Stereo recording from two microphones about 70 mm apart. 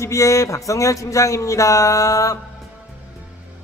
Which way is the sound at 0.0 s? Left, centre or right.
Left.